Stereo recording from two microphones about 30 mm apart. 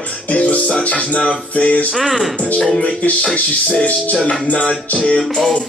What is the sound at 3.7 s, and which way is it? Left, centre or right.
Music, left.